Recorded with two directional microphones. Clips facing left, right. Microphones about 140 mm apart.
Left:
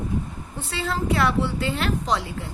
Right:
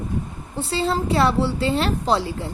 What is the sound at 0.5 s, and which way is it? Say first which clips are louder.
A woman's voice: right 5 dB; 30° right (ahead or behind).